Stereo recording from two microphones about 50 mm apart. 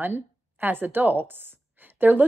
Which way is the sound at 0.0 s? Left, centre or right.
Right.